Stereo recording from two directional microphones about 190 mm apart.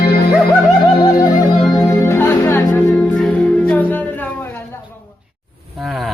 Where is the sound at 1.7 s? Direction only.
15° left (ahead or behind).